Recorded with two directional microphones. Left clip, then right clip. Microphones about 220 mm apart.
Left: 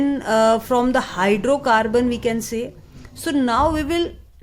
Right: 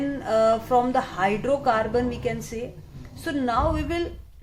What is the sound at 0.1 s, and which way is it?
A woman's voice, 45° left (ahead or behind).